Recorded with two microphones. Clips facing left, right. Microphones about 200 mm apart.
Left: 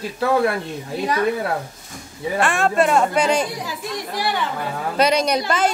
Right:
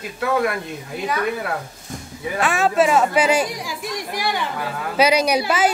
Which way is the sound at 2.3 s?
Centre (ahead or behind).